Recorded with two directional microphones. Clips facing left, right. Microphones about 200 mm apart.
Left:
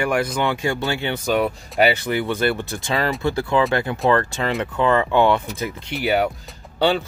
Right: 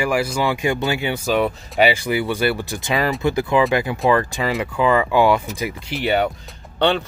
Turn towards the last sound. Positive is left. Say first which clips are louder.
# even
turn(degrees=5)  # may be behind; listen again after turning